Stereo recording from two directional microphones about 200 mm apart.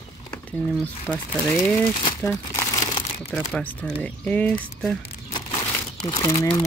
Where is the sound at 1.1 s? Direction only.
5° left (ahead or behind).